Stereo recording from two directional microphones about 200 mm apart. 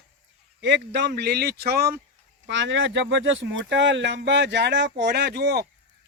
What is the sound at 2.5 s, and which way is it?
Speech, 65° right (ahead or behind).